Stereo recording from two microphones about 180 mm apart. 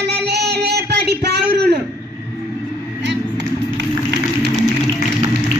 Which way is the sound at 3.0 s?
75° right (ahead or behind).